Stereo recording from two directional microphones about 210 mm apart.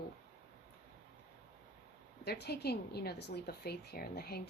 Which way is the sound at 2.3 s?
50° left (ahead or behind).